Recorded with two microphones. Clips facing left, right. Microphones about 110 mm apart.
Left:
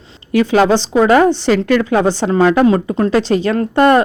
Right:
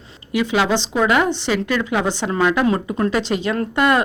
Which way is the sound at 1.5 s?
50° left (ahead or behind).